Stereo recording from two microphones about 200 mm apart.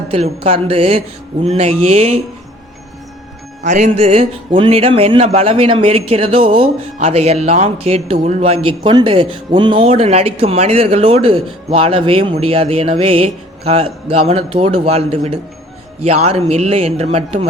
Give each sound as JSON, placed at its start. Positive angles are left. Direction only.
{"t": 0.1, "sound": "a man's voice", "side_deg": -30}
{"t": 3.6, "sound": "a man's voice", "side_deg": -35}